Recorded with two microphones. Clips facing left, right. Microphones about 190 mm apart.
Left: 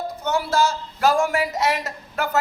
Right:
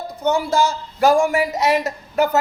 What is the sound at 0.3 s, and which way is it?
A man's voice, 15° right (ahead or behind).